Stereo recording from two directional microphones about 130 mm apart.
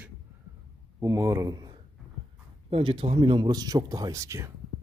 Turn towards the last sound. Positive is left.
turn(degrees=-25)  # may be behind; listen again after turning